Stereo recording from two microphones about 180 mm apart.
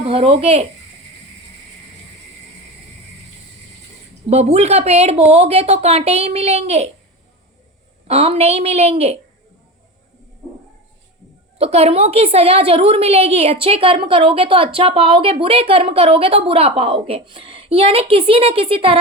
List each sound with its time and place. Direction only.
0.1 s a woman's voice: 30° right (ahead or behind)
4.3 s a woman's voice: 35° right (ahead or behind)
8.0 s a woman's voice: 35° right (ahead or behind)
11.5 s a woman's voice: 35° right (ahead or behind)